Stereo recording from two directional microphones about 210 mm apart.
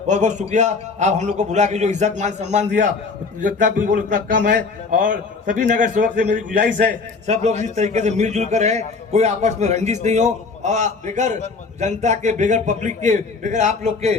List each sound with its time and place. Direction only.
0.1 s a man's voice: 35° right (ahead or behind)